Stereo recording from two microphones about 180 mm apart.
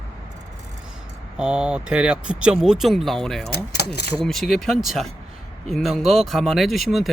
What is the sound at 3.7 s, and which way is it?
Speech, 65° left (ahead or behind).